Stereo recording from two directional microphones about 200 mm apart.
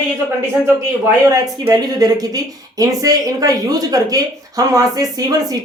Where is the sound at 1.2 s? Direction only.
20° right (ahead or behind).